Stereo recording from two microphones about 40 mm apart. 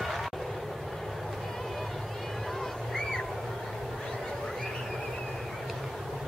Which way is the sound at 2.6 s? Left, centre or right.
Centre.